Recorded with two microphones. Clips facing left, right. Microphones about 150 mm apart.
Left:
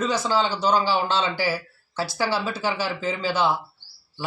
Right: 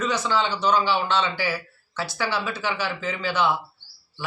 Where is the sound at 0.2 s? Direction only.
35° left (ahead or behind).